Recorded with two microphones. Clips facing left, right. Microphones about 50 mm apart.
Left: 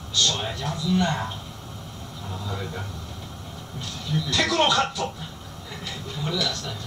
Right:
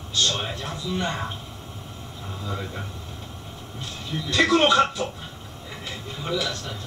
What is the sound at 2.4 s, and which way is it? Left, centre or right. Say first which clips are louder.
Speech: right 1 dB; centre.